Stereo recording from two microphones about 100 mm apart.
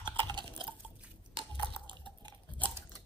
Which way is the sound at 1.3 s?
60° right (ahead or behind).